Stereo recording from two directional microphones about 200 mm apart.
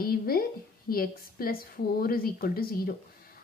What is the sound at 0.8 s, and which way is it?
A woman's voice, 45° left (ahead or behind).